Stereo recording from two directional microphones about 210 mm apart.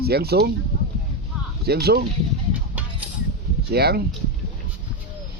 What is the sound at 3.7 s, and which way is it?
Speech, 50° right (ahead or behind).